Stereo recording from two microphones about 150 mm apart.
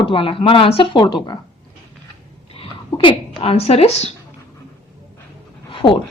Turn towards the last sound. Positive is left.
turn(degrees=35)  # may be behind; listen again after turning